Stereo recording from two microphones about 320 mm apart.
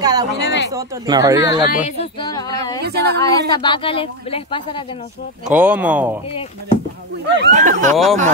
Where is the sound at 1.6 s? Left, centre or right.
Left.